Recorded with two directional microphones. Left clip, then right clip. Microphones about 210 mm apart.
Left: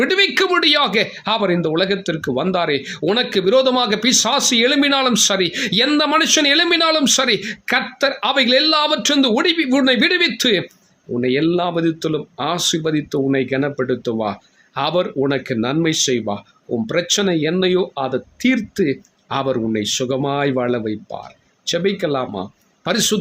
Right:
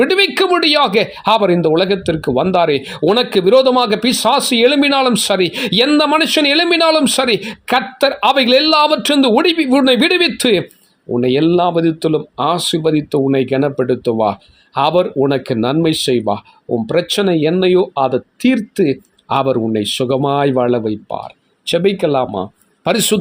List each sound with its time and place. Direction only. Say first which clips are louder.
0.0 s speech: right 3 dB; 25° right (ahead or behind)